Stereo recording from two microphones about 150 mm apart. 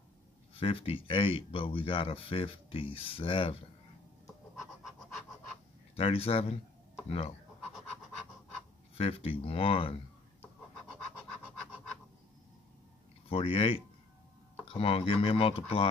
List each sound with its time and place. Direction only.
0.6 s speech: 40° left (ahead or behind)
4.6 s a sound: centre (ahead or behind)
5.9 s speech: 40° left (ahead or behind)
8.9 s speech: 40° left (ahead or behind)
13.3 s speech: 40° left (ahead or behind)